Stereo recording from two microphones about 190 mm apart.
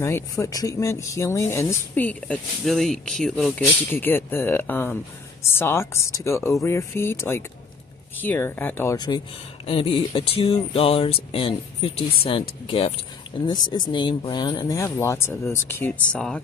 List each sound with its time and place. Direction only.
0.0 s speech: 15° left (ahead or behind)